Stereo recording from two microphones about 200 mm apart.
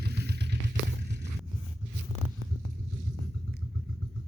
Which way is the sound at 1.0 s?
55° right (ahead or behind).